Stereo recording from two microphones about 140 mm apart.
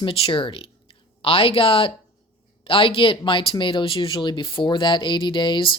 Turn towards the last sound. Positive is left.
turn(degrees=35)  # may be behind; listen again after turning